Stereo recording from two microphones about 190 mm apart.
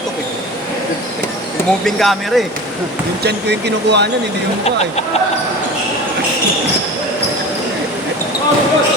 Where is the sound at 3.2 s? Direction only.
60° right (ahead or behind).